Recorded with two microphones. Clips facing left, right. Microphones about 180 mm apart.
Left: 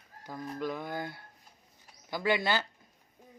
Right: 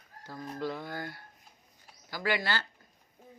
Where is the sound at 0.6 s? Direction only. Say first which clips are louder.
Left 1 dB; 20° left (ahead or behind).